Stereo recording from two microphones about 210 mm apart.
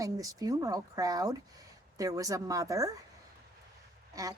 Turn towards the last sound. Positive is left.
turn(degrees=-15)  # may be behind; listen again after turning